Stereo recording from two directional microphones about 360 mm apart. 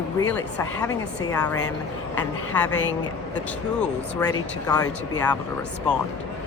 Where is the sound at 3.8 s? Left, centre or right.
Centre.